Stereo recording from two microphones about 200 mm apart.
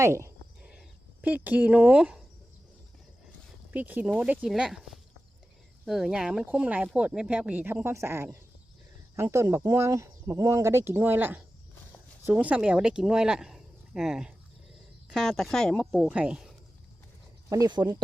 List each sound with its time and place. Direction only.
0.0 s cricket: 15° right (ahead or behind)
3.7 s a woman's voice: 10° right (ahead or behind)
17.5 s speech: 20° right (ahead or behind)